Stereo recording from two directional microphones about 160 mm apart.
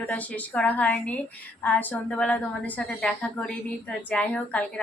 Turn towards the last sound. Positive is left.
turn(degrees=5)  # may be behind; listen again after turning